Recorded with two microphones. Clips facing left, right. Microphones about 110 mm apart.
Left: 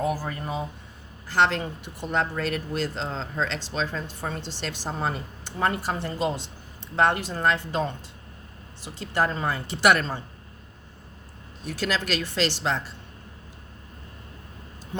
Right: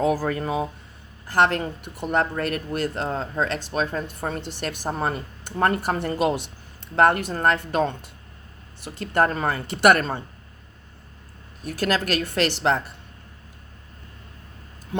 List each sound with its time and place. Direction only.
0.0 s speech: 90° right
1.3 s speech: 50° right (ahead or behind)
6.9 s speech: 55° right (ahead or behind)
11.6 s speech: 50° right (ahead or behind)